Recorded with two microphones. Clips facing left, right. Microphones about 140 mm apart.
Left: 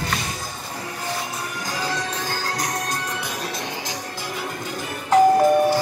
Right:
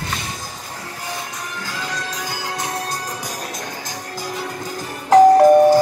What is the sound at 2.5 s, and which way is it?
Music, 30° right (ahead or behind).